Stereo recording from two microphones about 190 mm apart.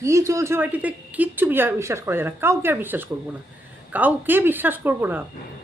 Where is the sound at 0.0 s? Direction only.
15° right (ahead or behind).